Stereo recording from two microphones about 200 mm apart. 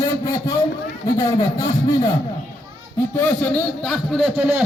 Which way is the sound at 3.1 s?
10° left (ahead or behind).